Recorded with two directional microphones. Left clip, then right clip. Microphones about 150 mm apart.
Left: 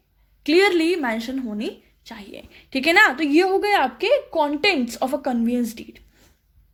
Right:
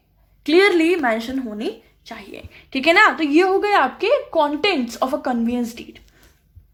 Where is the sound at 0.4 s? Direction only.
35° left (ahead or behind).